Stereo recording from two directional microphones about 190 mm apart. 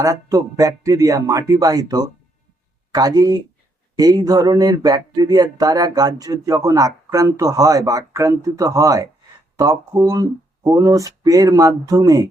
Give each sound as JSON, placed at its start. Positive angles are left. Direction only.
{"t": 0.0, "sound": "speech", "side_deg": -15}